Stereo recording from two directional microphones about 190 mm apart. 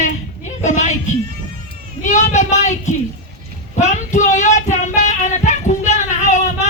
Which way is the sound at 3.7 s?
40° left (ahead or behind).